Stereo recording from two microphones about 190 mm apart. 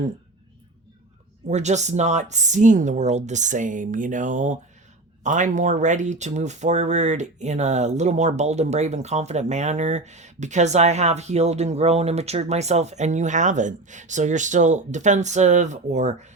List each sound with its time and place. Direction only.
1.5 s speech: 35° right (ahead or behind)